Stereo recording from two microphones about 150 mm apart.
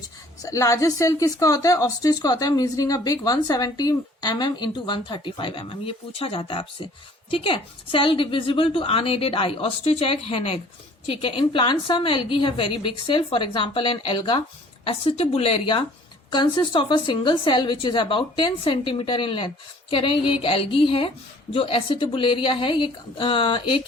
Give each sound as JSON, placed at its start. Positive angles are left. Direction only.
{"t": 0.4, "sound": "a woman's voice", "side_deg": 20}